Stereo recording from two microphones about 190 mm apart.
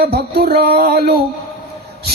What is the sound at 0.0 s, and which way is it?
Speech, 55° right (ahead or behind).